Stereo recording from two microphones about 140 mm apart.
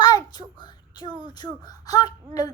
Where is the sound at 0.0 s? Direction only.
30° left (ahead or behind).